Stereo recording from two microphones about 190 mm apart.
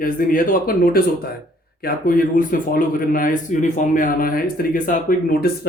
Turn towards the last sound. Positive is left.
turn(degrees=50)  # may be behind; listen again after turning